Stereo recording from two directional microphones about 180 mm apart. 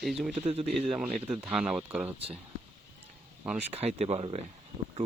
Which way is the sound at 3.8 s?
35° right (ahead or behind).